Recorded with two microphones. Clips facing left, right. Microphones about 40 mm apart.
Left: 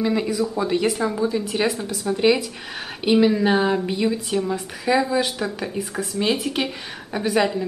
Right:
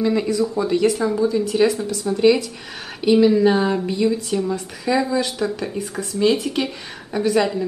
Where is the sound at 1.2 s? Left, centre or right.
Centre.